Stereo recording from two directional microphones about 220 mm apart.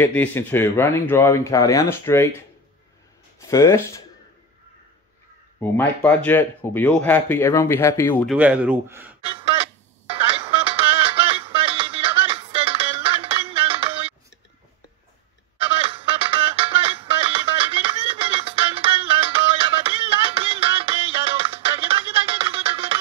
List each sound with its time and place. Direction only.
0.0 s speech: 10° left (ahead or behind)
3.4 s speech: 15° left (ahead or behind)
5.6 s speech: 5° left (ahead or behind)
8.3 s speech: 5° right (ahead or behind)
9.2 s a sound: 25° right (ahead or behind)
10.1 s music: 25° right (ahead or behind)
15.5 s music: 25° right (ahead or behind)